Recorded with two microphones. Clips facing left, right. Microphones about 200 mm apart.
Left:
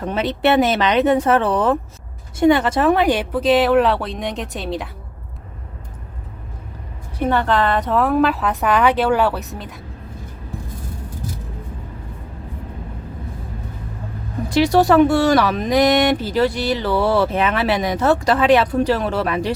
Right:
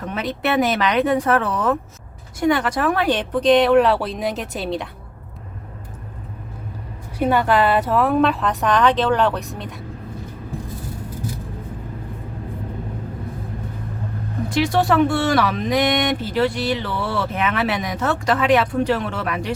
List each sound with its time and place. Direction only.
0.0 s speech: 30° left (ahead or behind)
3.1 s speech: 10° left (ahead or behind)
7.2 s speech: 10° right (ahead or behind)
14.5 s speech: 40° left (ahead or behind)